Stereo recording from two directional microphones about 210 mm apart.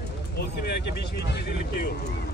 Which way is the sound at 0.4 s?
50° left (ahead or behind).